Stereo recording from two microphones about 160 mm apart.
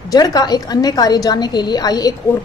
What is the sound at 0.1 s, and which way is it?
A woman's voice, 25° left (ahead or behind).